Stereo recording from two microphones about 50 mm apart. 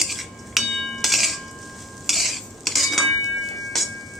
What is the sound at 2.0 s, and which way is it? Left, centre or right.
Cutlery, centre.